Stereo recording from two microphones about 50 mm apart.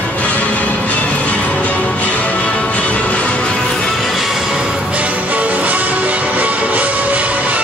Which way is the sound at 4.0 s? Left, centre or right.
Centre.